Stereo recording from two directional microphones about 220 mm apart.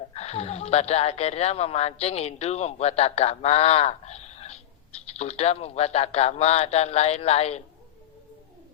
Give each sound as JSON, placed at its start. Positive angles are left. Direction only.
{"t": 0.1, "sound": "speech", "side_deg": 30}